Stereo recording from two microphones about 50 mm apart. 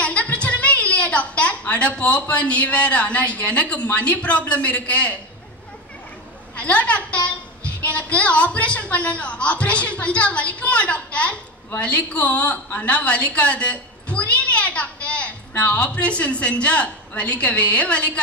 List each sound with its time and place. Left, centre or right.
0.0 s a woman's voice: left
6.5 s a woman's voice: left